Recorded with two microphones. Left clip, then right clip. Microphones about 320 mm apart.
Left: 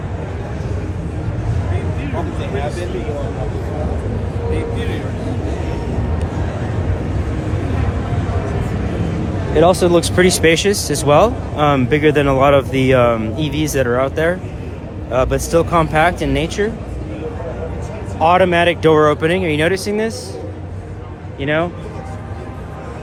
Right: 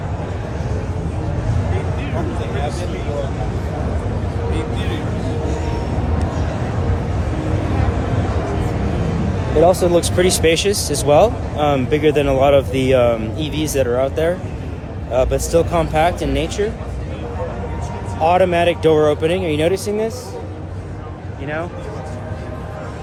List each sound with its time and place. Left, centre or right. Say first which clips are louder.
9.6 s speech: left 1 dB; left
18.2 s speech: left 2 dB; left